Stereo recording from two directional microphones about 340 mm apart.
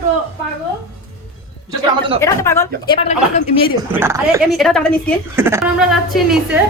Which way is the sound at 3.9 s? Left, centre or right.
Centre.